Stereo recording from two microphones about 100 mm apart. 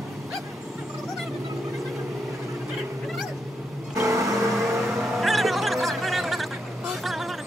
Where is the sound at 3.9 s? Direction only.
30° right (ahead or behind).